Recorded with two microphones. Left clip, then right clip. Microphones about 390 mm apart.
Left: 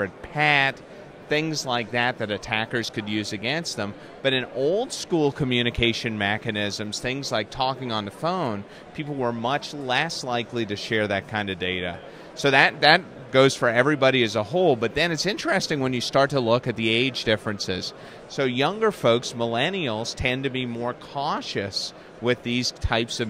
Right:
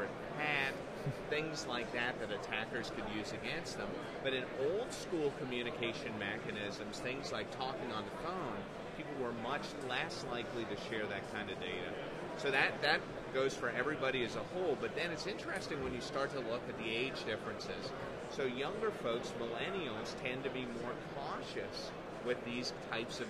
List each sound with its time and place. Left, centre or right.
0.4 s speech: left
1.3 s a man's voice: left